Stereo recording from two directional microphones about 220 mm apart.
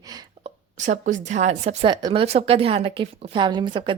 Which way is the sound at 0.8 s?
35° right (ahead or behind).